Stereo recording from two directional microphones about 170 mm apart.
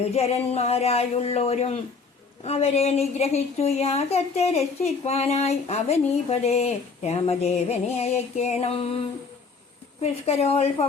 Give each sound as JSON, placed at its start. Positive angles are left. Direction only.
{"t": 0.1, "sound": "a woman's voice", "side_deg": 40}
{"t": 10.0, "sound": "a woman's voice", "side_deg": 40}